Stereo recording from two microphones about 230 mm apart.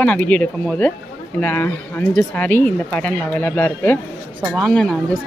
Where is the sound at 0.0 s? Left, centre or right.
Centre.